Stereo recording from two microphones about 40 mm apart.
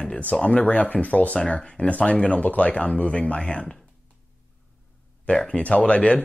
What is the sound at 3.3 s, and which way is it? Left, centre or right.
Speech, left.